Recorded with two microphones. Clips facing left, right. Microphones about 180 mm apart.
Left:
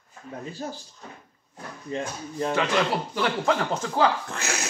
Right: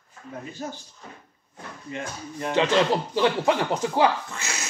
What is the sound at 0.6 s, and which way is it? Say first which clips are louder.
Speech: even; 35° left (ahead or behind).